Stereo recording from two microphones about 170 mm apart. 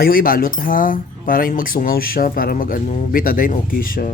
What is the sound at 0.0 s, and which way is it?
Speech, 60° left (ahead or behind).